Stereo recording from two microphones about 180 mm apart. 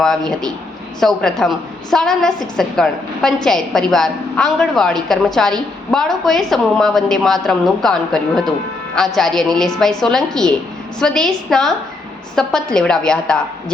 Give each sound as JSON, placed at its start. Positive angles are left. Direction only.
{"t": 0.0, "sound": "a woman's voice", "side_deg": 0}